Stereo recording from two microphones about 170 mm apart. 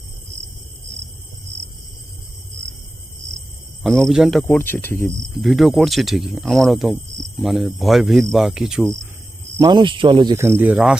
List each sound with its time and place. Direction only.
1.5 s a sound: 40° right (ahead or behind)
3.8 s speech: centre (ahead or behind)
4.4 s speech: 10° left (ahead or behind)
5.3 s speech: centre (ahead or behind)
9.6 s speech: 25° right (ahead or behind)
10.3 s speech: 15° right (ahead or behind)